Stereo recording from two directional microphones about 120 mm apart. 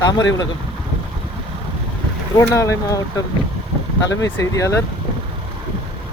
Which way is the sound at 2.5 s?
25° left (ahead or behind).